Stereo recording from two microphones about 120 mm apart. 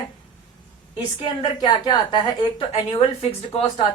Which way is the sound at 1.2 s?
40° left (ahead or behind).